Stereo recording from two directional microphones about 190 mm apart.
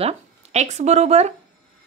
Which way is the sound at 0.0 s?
35° right (ahead or behind).